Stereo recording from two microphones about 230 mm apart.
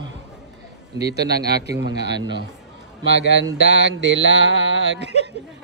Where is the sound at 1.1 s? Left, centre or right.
Right.